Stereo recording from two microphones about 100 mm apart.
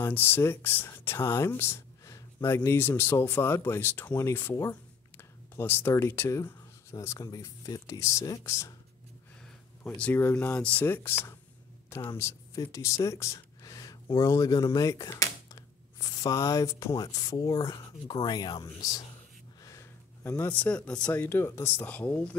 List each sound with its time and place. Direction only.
0.0 s speech: 20° left (ahead or behind)
9.8 s speech: 15° left (ahead or behind); by 19.0 s 40° left (ahead or behind)
19.6 s a sound: 30° left (ahead or behind); by 21.2 s 10° left (ahead or behind)
21.2 s speech: 25° left (ahead or behind)